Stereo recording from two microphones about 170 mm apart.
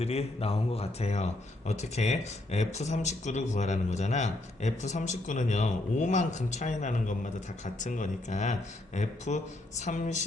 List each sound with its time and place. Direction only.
0.0 s speech: 35° left (ahead or behind)